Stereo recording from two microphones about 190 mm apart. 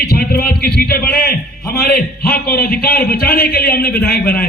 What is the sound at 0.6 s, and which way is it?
A man's voice, 55° left (ahead or behind).